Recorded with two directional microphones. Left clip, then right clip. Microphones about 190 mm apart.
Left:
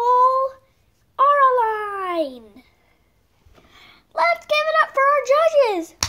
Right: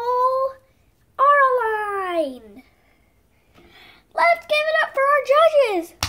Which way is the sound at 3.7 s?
Centre (ahead or behind).